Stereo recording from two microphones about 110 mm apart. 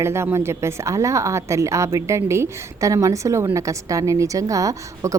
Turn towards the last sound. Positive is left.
turn(degrees=-30)  # may be behind; listen again after turning